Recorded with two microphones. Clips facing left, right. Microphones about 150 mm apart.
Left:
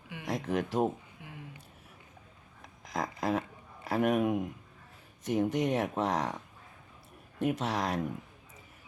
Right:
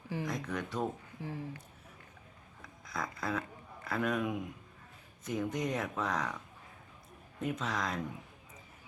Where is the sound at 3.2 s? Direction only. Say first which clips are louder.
Left 6 dB; 90° left.